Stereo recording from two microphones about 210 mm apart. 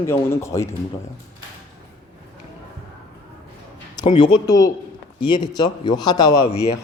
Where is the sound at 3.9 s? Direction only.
20° left (ahead or behind).